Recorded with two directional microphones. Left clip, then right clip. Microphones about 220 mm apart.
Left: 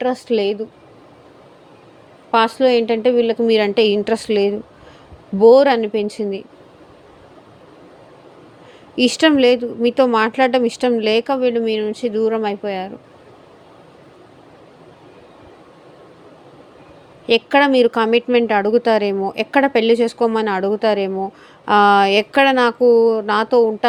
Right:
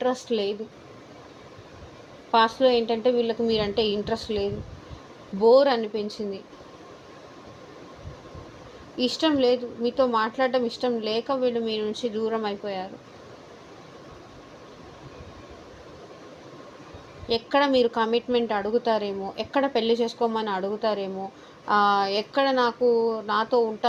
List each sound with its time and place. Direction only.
0.0 s a woman's voice: 35° left (ahead or behind)
2.3 s a woman's voice: 35° left (ahead or behind)
9.0 s a woman's voice: 45° left (ahead or behind)
17.2 s a woman's voice: 40° left (ahead or behind)